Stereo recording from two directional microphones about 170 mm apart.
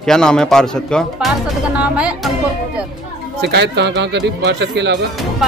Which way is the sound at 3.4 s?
85° right.